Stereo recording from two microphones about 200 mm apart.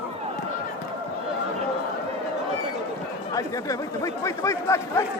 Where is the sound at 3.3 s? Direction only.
15° left (ahead or behind).